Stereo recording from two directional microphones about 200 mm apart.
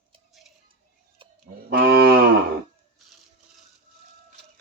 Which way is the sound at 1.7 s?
50° right (ahead or behind).